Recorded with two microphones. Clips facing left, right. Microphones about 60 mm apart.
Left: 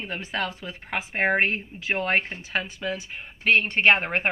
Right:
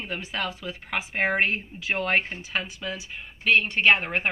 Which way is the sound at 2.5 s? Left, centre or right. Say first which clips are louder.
Left 3 dB; left.